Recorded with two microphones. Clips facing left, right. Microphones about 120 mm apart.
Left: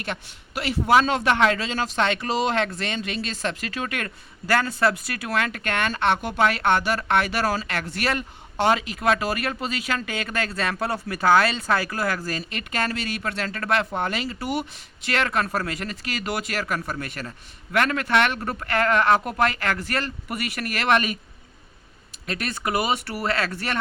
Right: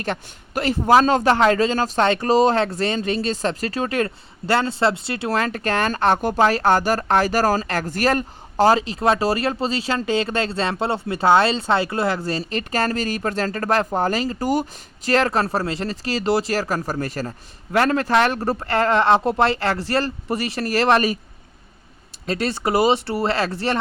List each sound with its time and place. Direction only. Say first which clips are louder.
0.0 s a man's voice: right 5 dB; 40° right (ahead or behind)
22.3 s speech: right 6 dB; 30° right (ahead or behind)